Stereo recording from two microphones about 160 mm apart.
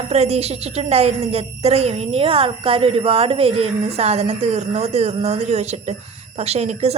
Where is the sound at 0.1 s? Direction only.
40° right (ahead or behind).